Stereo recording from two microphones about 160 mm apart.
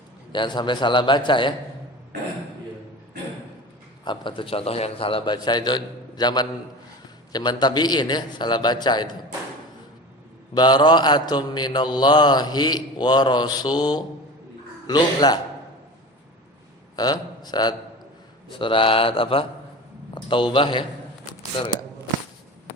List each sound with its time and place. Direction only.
0.3 s mantra: 30° left (ahead or behind)
4.0 s mantra: 30° left (ahead or behind)
10.5 s mantra: 25° left (ahead or behind)
17.0 s a man's voice: 25° left (ahead or behind)